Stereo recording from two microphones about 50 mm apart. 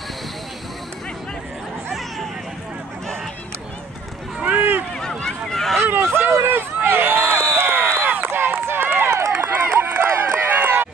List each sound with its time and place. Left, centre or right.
4.4 s run: right
5.5 s a sound: centre
6.0 s run: right
9.1 s run: right